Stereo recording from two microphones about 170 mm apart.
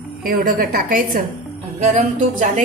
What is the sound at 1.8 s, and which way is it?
Speech, 40° right (ahead or behind).